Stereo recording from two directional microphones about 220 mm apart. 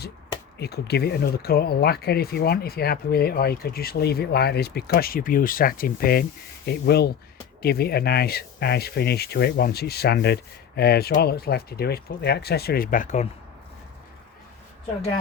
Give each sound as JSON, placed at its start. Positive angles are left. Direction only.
{"t": 0.6, "sound": "speech", "side_deg": 45}